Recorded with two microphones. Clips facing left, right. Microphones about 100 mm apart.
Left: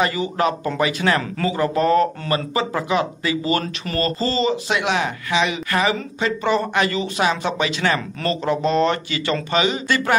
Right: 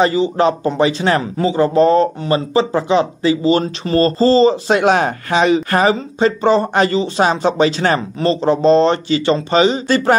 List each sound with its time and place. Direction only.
0.0 s speech: 30° right (ahead or behind)